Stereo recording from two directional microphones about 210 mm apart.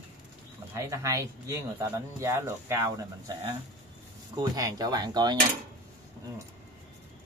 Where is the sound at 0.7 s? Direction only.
15° right (ahead or behind).